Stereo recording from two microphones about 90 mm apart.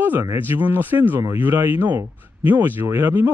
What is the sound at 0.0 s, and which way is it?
Speech, 25° right (ahead or behind).